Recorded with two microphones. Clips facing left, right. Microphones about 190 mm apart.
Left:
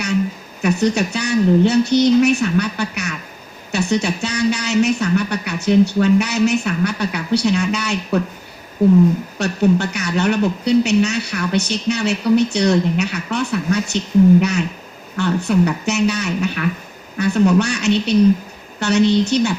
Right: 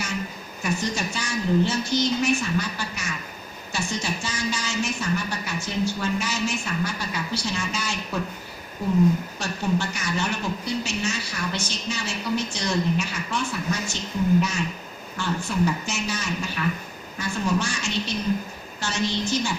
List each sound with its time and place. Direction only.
0.6 s a woman's voice: 70° left (ahead or behind)
9.4 s a woman's voice: 65° left (ahead or behind)
15.1 s a woman's voice: 65° left (ahead or behind)